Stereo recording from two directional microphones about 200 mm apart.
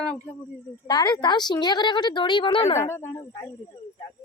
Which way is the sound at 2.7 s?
10° left (ahead or behind).